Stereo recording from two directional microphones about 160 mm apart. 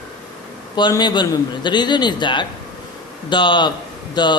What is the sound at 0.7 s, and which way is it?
Speech, 25° left (ahead or behind).